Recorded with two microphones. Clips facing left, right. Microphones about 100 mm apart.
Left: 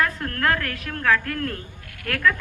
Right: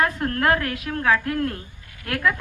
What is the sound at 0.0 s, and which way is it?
A woman's voice, 25° right (ahead or behind).